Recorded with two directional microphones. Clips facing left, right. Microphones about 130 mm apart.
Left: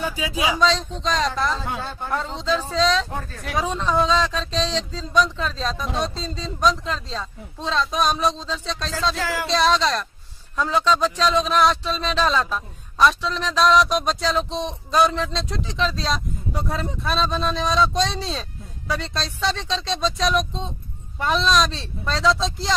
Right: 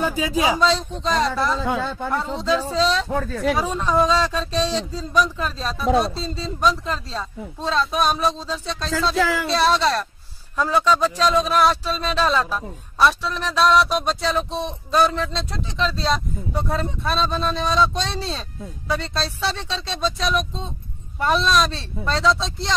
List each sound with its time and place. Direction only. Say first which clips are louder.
0.0 s speech: right 4 dB; 45° right (ahead or behind)
0.6 s speech: right 1 dB; 5° right (ahead or behind)